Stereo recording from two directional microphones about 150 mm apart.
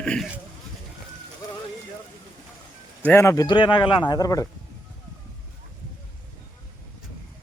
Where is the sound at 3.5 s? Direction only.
30° left (ahead or behind).